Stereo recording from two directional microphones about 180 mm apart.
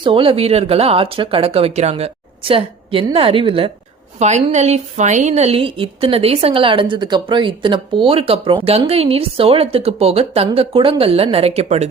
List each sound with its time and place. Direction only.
0.0 s a woman's voice: 30° right (ahead or behind)